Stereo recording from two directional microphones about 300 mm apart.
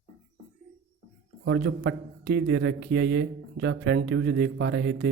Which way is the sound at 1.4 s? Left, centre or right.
Right.